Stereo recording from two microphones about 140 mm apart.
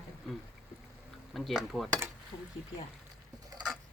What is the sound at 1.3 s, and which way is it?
Speech, centre (ahead or behind).